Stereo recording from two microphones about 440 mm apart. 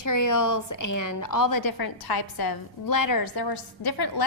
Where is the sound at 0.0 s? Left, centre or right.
Left.